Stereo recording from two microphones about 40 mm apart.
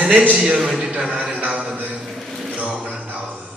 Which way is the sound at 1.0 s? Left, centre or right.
Right.